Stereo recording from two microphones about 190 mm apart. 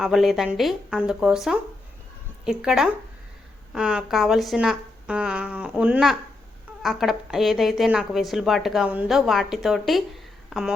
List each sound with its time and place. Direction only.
0.0 s a woman's voice: centre (ahead or behind)